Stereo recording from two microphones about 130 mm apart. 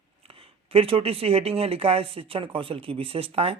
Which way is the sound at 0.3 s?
45° right (ahead or behind).